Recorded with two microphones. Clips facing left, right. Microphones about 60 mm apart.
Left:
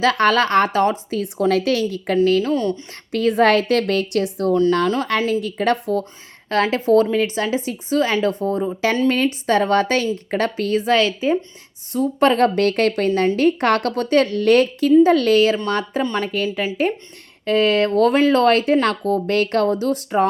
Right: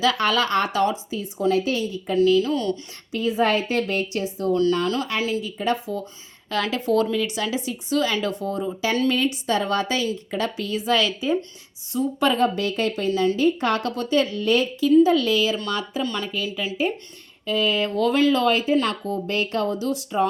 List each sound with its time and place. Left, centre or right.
0.0 s a woman's voice: left
1.1 s a woman's voice: left
2.4 s a woman's voice: left
3.1 s a woman's voice: left
5.0 s a woman's voice: left
6.5 s a woman's voice: left
15.5 s speech: left